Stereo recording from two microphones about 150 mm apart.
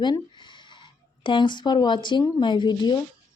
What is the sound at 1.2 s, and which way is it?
A woman's voice, 30° left (ahead or behind).